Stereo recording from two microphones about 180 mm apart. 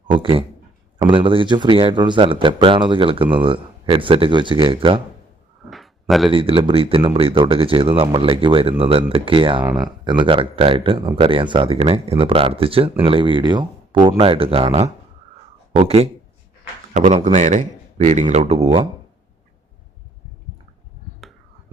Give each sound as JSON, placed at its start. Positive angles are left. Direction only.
{"t": 0.1, "sound": "speech", "side_deg": -30}
{"t": 5.7, "sound": "a sound", "side_deg": 0}
{"t": 6.3, "sound": "speech", "side_deg": -30}
{"t": 9.6, "sound": "speech", "side_deg": -5}
{"t": 10.0, "sound": "a man's voice", "side_deg": -25}
{"t": 17.3, "sound": "speech", "side_deg": -45}